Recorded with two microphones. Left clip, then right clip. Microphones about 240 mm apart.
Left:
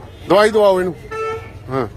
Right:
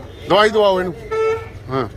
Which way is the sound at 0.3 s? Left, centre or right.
Left.